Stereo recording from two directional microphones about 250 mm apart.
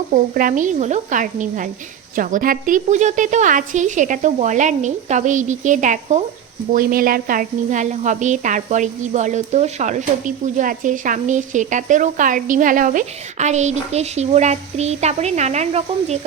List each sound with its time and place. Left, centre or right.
0.1 s a woman's voice: right